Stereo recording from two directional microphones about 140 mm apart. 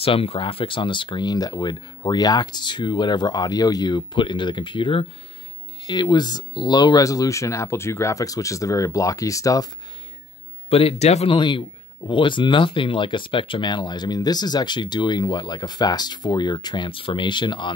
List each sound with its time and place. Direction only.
0.0 s speech: 40° left (ahead or behind); by 9.7 s 25° left (ahead or behind)
10.7 s speech: 45° left (ahead or behind)
11.3 s speech: 35° left (ahead or behind)